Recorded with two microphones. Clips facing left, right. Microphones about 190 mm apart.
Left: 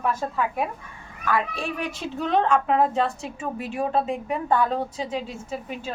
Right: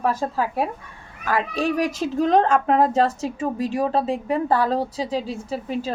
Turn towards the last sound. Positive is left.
turn(degrees=-35)  # may be behind; listen again after turning